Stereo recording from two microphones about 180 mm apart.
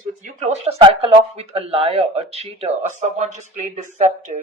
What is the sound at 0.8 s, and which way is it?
Speech, 35° right (ahead or behind).